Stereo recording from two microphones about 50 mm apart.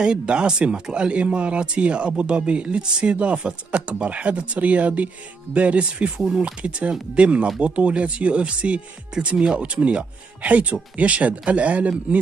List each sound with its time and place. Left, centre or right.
0.0 s speech: centre